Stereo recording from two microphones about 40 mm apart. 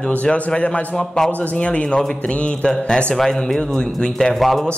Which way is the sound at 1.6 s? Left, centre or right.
Left.